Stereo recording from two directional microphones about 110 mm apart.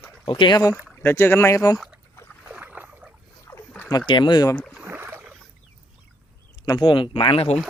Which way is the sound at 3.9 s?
45° left (ahead or behind).